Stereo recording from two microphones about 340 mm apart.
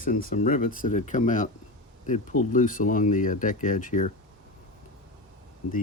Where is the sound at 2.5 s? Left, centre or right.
Left.